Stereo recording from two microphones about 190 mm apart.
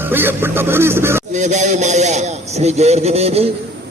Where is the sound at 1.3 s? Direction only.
40° right (ahead or behind).